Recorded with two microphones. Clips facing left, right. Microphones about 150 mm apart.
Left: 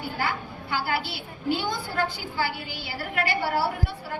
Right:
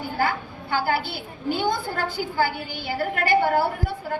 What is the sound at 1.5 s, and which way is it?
A woman's voice, 50° right (ahead or behind).